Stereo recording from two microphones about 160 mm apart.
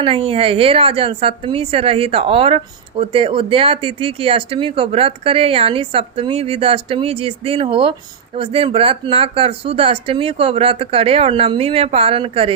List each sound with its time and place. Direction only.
0.0 s a woman's voice: 35° right (ahead or behind)